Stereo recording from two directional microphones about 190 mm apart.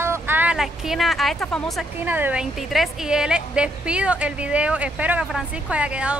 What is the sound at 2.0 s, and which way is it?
A woman's voice, 10° right (ahead or behind).